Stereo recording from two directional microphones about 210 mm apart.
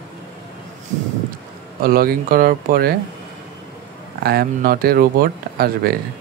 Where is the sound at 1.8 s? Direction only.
45° right (ahead or behind).